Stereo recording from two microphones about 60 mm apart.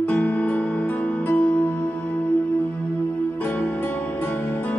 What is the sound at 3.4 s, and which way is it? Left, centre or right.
Music, left.